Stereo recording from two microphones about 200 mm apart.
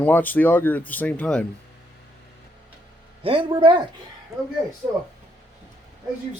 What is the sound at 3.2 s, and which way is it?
Speech, 25° right (ahead or behind).